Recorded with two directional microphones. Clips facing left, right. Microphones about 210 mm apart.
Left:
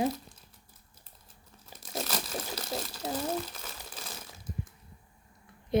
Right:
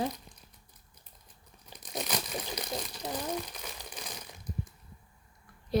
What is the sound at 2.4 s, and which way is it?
Crumpling, 5° left (ahead or behind).